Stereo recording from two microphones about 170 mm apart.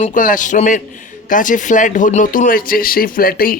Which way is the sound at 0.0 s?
50° left (ahead or behind).